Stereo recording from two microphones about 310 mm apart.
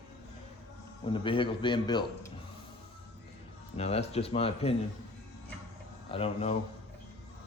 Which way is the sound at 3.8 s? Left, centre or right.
Centre.